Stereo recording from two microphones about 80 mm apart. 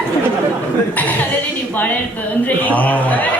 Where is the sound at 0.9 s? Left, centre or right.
Centre.